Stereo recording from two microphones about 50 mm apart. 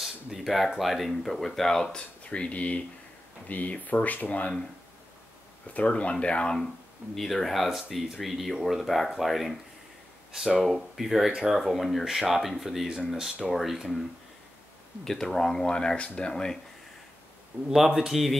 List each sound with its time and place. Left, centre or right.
0.0 s a sound: centre
0.7 s speech: centre
2.2 s speech: left
5.7 s speech: left
7.2 s speech: centre
10.6 s speech: centre
15.0 s speech: centre
17.6 s speech: centre